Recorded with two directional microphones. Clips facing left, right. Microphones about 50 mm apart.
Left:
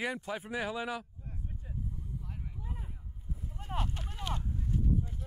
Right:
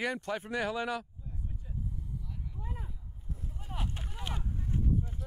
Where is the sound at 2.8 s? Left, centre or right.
Centre.